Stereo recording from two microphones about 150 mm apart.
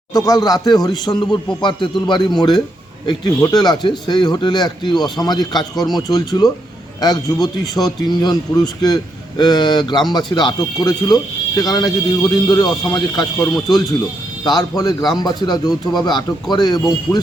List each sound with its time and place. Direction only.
0.1 s speech: 25° left (ahead or behind)
3.2 s speech: 25° left (ahead or behind)
5.7 s speech: centre (ahead or behind)
6.0 s speech: 25° left (ahead or behind)